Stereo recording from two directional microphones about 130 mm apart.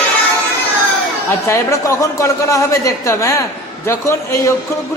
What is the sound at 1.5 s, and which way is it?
A man's voice, 25° left (ahead or behind).